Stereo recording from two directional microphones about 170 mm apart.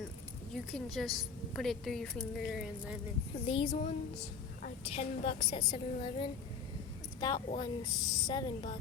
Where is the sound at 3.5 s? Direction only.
35° left (ahead or behind).